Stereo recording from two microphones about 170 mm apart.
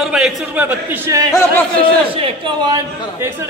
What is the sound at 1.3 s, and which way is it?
Speech, 15° left (ahead or behind).